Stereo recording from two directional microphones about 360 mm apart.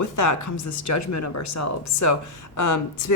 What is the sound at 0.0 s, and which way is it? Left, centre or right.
Speech, left.